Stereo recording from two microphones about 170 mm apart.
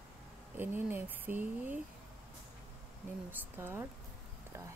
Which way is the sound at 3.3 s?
15° right (ahead or behind).